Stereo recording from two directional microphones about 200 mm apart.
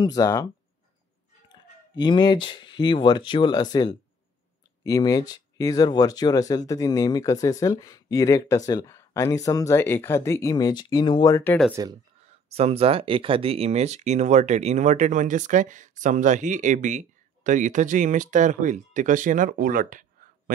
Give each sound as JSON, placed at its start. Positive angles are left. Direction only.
{"t": 0.0, "sound": "speech", "side_deg": 15}
{"t": 1.5, "sound": "a sound", "side_deg": 20}
{"t": 2.4, "sound": "speech", "side_deg": 20}
{"t": 11.7, "sound": "speech", "side_deg": -20}
{"t": 12.4, "sound": "speech", "side_deg": -30}